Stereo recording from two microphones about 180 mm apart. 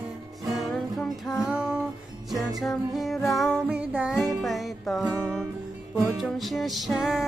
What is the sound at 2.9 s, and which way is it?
Music, centre (ahead or behind).